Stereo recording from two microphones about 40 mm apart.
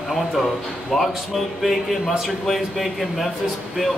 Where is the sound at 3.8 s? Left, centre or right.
Centre.